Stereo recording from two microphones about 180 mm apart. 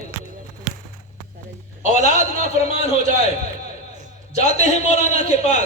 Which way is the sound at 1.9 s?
40° left (ahead or behind).